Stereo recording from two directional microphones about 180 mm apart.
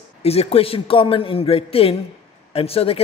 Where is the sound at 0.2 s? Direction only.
35° left (ahead or behind).